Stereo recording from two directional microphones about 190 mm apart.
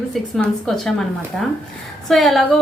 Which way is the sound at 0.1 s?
5° left (ahead or behind).